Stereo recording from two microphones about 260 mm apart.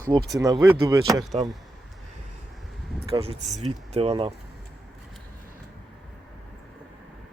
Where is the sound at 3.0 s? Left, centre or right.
Right.